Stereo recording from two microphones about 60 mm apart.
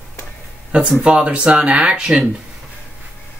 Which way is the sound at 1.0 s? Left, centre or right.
Centre.